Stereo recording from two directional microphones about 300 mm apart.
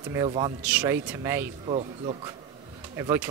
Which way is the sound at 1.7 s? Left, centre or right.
Centre.